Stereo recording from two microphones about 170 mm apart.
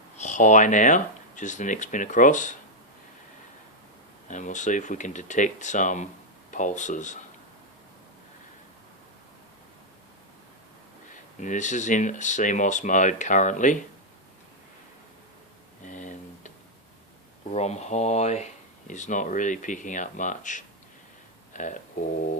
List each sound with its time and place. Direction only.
0.2 s speech: 45° left (ahead or behind)
4.3 s speech: 45° left (ahead or behind)
11.1 s speech: 45° left (ahead or behind)
15.8 s a sound: 50° left (ahead or behind)
17.5 s speech: 40° left (ahead or behind)
21.5 s a sound: 45° left (ahead or behind)